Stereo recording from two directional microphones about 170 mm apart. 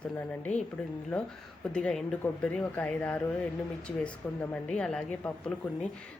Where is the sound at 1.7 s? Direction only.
5° left (ahead or behind).